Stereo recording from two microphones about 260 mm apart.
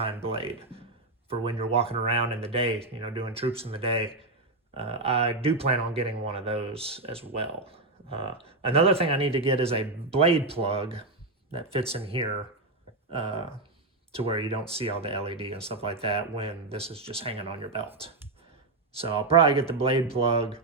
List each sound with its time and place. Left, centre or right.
0.0 s speech: right
18.9 s speech: right